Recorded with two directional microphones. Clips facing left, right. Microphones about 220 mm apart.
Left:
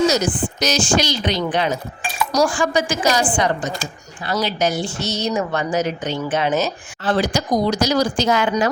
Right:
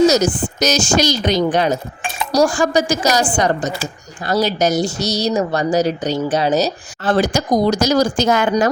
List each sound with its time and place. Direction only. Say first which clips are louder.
0.1 s speech: right 4 dB; 40° right (ahead or behind)
2.0 s dishes: right 2 dB; 25° right (ahead or behind)
2.5 s a woman's voice: right 4 dB; 40° right (ahead or behind)